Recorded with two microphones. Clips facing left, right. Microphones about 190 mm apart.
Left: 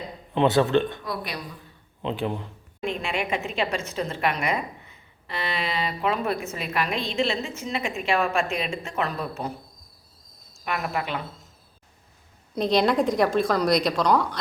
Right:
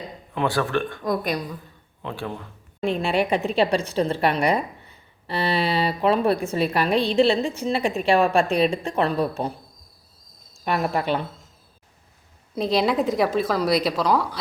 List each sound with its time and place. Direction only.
0.3 s a man's voice: 20° left (ahead or behind)
1.0 s speech: 45° right (ahead or behind)
2.0 s a man's voice: 20° left (ahead or behind)
2.8 s a woman's voice: 35° right (ahead or behind)
10.7 s a woman's voice: 35° right (ahead or behind)
12.5 s speech: 5° right (ahead or behind)